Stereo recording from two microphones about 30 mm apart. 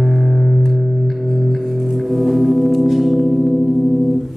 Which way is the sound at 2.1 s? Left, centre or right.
Centre.